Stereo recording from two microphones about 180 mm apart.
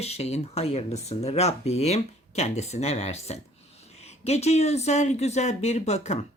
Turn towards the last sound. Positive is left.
turn(degrees=40)  # may be behind; listen again after turning